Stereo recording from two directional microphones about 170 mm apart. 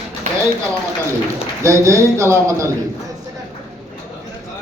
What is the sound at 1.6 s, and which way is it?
A man's voice, 15° right (ahead or behind).